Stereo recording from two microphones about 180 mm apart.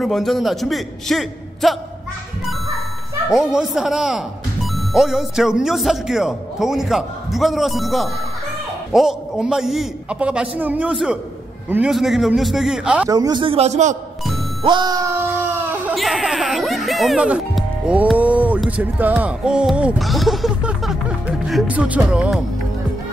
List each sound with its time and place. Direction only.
0.0 s speech: centre (ahead or behind)
3.3 s speech: centre (ahead or behind)
13.1 s a man's voice: 25° right (ahead or behind); by 13.9 s 40° right (ahead or behind)
14.6 s speech: 25° right (ahead or behind); by 22.4 s 5° right (ahead or behind)